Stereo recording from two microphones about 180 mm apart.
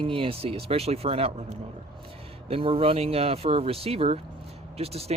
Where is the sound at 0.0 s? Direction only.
30° right (ahead or behind).